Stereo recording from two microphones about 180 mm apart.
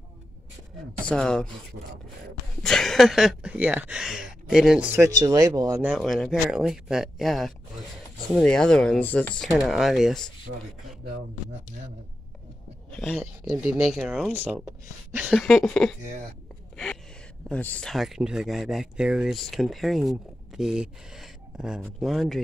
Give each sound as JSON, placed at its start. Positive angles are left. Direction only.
{"t": 1.0, "sound": "speech", "side_deg": 5}
{"t": 2.6, "sound": "speech", "side_deg": 0}
{"t": 5.8, "sound": "speech", "side_deg": -5}
{"t": 12.9, "sound": "speech", "side_deg": 0}
{"t": 16.7, "sound": "gasp", "side_deg": 5}
{"t": 17.5, "sound": "speech", "side_deg": 10}